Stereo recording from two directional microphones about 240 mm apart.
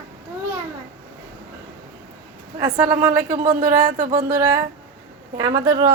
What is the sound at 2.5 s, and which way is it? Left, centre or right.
Speech, centre.